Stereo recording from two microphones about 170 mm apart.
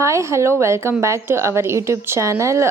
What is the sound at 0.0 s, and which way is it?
A woman's voice, 15° right (ahead or behind).